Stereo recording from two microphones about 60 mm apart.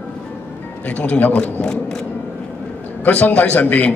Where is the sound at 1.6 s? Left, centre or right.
Centre.